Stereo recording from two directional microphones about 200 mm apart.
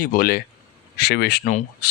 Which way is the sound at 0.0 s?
45° left (ahead or behind).